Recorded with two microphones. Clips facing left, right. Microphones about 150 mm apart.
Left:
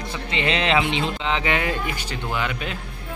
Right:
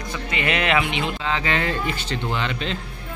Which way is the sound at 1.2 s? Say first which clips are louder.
Even; 15° left (ahead or behind).